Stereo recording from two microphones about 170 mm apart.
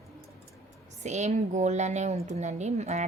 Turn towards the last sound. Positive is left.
turn(degrees=-40)  # may be behind; listen again after turning